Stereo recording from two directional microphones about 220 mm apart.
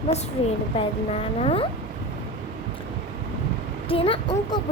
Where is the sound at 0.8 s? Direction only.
25° left (ahead or behind).